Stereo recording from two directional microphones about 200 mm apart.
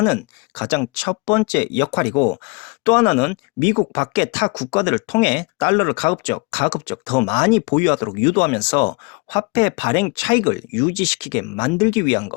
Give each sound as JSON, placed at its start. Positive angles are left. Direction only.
{"t": 0.0, "sound": "speech", "side_deg": 15}